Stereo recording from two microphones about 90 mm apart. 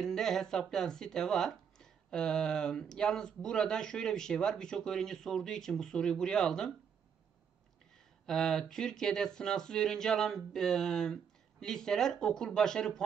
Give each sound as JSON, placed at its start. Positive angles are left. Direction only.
{"t": 0.0, "sound": "speech", "side_deg": 5}
{"t": 8.3, "sound": "speech", "side_deg": 5}